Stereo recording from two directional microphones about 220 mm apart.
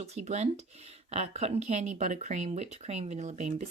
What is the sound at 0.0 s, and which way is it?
Speech, 30° right (ahead or behind).